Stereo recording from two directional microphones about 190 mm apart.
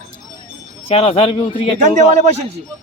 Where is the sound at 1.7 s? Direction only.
40° right (ahead or behind).